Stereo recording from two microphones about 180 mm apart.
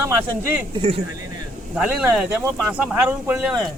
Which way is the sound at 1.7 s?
5° right (ahead or behind).